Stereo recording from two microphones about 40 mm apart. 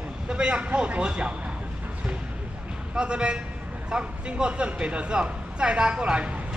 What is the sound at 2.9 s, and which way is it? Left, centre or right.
Speech, right.